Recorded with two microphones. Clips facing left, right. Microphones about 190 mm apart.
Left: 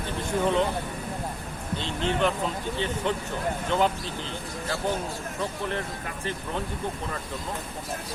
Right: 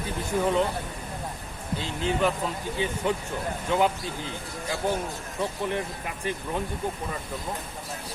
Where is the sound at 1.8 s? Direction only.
5° right (ahead or behind).